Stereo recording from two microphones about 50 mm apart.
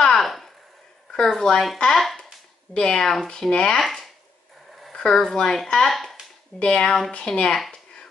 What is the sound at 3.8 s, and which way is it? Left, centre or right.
Speech, centre.